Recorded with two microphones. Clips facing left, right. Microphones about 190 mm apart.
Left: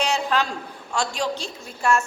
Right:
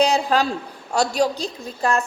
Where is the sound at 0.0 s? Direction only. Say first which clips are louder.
Right 5 dB; 35° right (ahead or behind).